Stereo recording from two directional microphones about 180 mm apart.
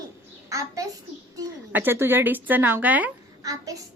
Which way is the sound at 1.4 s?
10° right (ahead or behind).